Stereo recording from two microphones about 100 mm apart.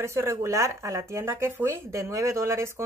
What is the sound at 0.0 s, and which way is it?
Speech, 25° right (ahead or behind).